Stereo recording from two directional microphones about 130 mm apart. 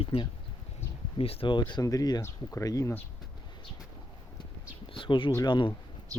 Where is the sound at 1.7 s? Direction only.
25° left (ahead or behind).